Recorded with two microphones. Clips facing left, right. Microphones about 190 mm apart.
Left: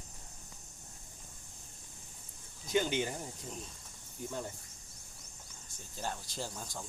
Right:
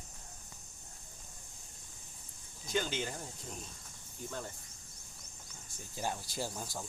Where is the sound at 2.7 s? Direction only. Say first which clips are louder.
Left 4 dB; 15° left (ahead or behind).